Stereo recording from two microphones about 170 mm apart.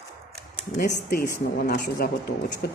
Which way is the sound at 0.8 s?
65° left (ahead or behind).